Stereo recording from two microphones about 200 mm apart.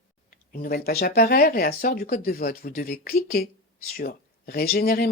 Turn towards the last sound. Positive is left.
turn(degrees=50)  # may be behind; listen again after turning